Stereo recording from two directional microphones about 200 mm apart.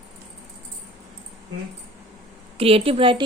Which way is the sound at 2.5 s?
30° right (ahead or behind).